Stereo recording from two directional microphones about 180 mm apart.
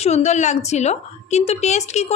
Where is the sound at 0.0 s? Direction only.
40° left (ahead or behind).